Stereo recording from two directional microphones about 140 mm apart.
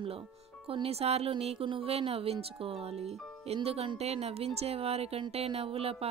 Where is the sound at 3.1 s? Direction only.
Centre (ahead or behind).